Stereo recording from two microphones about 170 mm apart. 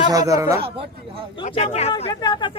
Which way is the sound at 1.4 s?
40° left (ahead or behind).